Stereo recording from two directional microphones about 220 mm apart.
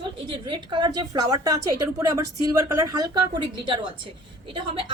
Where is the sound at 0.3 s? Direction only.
20° right (ahead or behind).